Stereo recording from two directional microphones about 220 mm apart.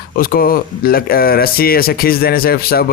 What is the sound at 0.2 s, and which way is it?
Speech, 40° left (ahead or behind).